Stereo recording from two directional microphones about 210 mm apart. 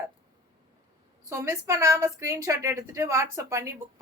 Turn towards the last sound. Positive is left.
turn(degrees=-15)  # may be behind; listen again after turning